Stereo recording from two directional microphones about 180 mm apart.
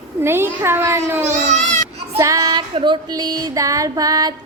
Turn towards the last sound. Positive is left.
turn(degrees=-20)  # may be behind; listen again after turning